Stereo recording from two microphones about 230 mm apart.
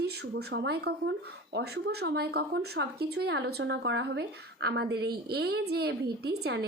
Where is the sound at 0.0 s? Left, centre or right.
Right.